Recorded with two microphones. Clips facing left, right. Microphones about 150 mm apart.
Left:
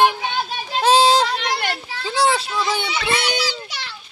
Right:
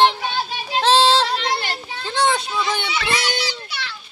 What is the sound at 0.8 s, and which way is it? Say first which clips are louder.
Child singing: left 1 dB; 15° left (ahead or behind).